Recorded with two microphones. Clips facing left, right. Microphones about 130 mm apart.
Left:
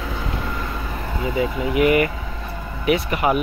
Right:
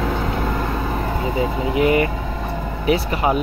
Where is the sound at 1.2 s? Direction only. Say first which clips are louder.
Left 2 dB; 30° right (ahead or behind).